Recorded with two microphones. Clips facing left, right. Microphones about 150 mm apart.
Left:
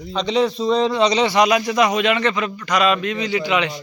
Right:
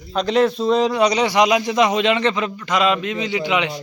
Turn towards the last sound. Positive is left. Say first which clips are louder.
# even
turn(degrees=-20)  # may be behind; listen again after turning